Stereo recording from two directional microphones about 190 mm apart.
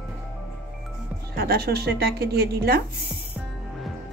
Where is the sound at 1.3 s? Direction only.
55° right (ahead or behind).